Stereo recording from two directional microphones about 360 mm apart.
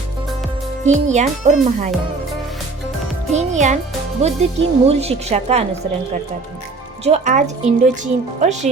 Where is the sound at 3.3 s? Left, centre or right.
Centre.